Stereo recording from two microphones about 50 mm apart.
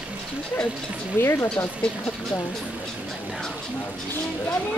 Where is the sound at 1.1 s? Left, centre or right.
Left.